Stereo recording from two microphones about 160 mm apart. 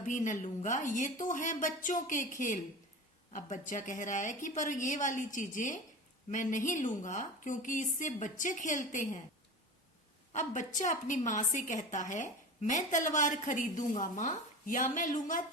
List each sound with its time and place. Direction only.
0.0 s a woman's voice: 50° left (ahead or behind)
10.3 s a woman's voice: 50° left (ahead or behind)